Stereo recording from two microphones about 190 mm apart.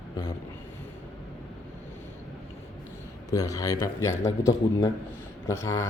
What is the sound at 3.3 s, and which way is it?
A man's voice, 20° left (ahead or behind).